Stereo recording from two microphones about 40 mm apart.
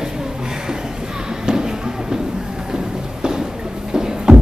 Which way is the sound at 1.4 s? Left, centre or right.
Centre.